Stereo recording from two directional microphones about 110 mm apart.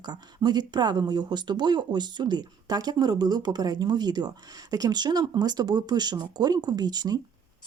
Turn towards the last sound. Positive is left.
turn(degrees=-40)  # may be behind; listen again after turning